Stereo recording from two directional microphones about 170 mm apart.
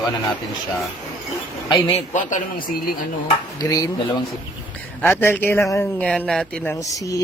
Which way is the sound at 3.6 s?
20° left (ahead or behind).